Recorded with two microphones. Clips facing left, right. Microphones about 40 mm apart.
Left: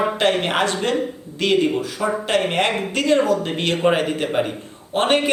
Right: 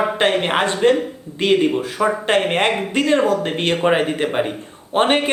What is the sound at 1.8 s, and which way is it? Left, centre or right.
Speech, right.